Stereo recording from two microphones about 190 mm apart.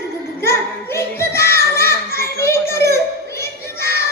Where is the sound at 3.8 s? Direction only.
55° left (ahead or behind).